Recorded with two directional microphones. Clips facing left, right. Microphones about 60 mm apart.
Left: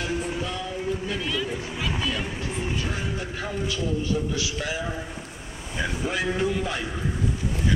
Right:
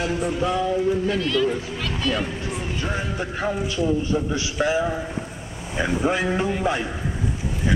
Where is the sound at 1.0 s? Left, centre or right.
Centre.